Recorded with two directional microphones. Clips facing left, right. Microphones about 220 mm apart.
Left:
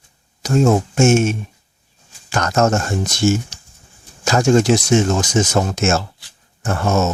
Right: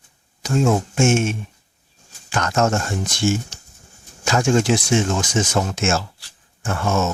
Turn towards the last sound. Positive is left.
turn(degrees=40)  # may be behind; listen again after turning